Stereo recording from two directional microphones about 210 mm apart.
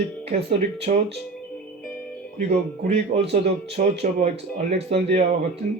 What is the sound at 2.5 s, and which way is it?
Speech, 30° right (ahead or behind).